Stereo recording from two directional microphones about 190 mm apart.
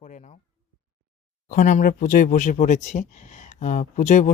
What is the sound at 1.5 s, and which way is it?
Speech, 40° left (ahead or behind).